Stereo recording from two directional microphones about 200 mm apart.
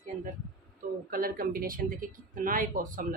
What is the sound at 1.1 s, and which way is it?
Speech, 45° right (ahead or behind).